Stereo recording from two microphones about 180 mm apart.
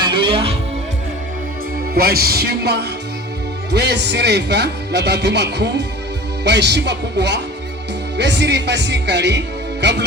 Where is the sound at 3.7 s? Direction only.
70° right (ahead or behind).